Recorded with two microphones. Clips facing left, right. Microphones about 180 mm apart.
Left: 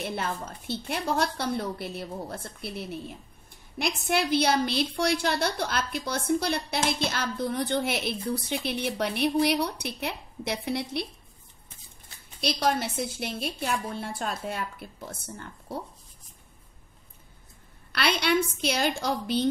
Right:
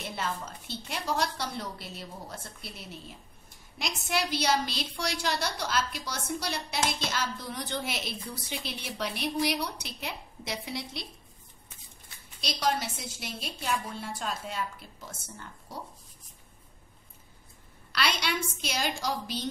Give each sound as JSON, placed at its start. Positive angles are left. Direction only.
{"t": 0.0, "sound": "a woman's voice", "side_deg": 55}
{"t": 12.4, "sound": "a woman's voice", "side_deg": 55}
{"t": 17.9, "sound": "a woman's voice", "side_deg": 55}